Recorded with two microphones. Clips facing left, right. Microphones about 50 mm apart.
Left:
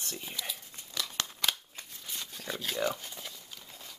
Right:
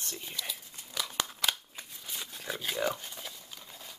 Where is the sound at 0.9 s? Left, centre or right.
Centre.